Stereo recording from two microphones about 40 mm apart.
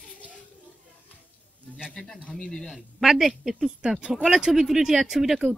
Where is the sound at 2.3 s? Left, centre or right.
Centre.